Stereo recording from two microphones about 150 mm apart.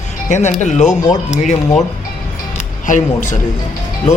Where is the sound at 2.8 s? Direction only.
55° left (ahead or behind).